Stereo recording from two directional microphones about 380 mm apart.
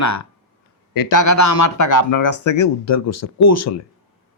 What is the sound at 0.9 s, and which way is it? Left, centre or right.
Speech, left.